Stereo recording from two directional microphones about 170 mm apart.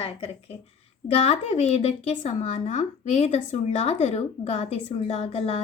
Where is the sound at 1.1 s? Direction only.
35° left (ahead or behind).